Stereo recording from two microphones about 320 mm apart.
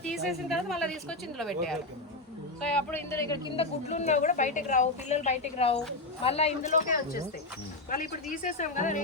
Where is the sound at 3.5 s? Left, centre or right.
Centre.